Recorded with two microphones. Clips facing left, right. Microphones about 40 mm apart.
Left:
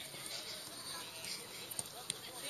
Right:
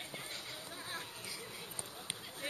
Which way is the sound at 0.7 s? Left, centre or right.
Right.